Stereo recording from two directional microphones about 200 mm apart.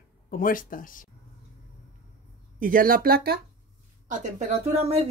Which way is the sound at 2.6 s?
45° right (ahead or behind).